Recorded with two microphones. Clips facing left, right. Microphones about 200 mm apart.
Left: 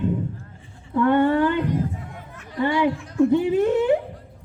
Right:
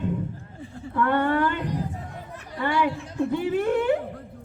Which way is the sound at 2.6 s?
20° left (ahead or behind).